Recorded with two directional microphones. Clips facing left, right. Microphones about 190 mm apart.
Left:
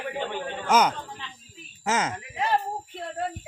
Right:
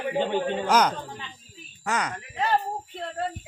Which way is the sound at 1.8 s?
20° left (ahead or behind).